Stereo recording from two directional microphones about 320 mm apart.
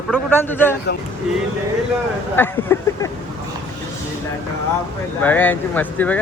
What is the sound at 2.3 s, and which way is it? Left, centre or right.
Speech, centre.